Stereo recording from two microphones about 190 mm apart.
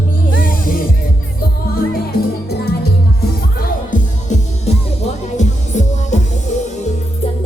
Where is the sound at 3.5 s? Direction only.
40° left (ahead or behind).